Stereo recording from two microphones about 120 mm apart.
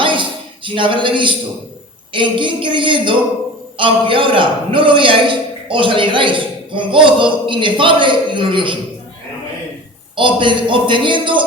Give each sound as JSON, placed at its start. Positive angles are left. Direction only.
{"t": 0.0, "sound": "a sound", "side_deg": -45}
{"t": 2.1, "sound": "a man's voice", "side_deg": -45}
{"t": 10.2, "sound": "a man's voice", "side_deg": -45}